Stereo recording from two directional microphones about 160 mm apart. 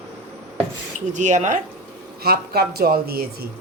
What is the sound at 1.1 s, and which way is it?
Speech, 50° right (ahead or behind).